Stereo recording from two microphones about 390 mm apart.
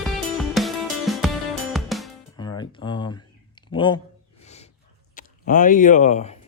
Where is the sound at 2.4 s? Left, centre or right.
Centre.